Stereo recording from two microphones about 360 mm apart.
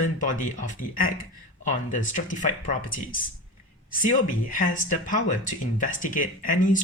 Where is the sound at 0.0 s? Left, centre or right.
Left.